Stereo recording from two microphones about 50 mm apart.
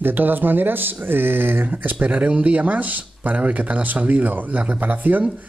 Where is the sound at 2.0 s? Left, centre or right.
Right.